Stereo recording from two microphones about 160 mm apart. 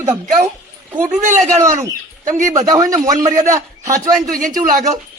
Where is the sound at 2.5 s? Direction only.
20° right (ahead or behind).